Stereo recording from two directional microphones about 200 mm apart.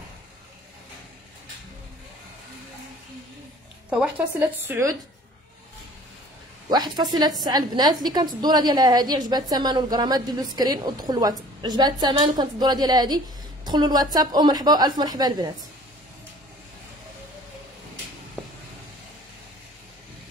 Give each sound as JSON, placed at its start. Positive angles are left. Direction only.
{"t": 4.6, "sound": "speech", "side_deg": -15}
{"t": 6.7, "sound": "a woman's voice", "side_deg": -20}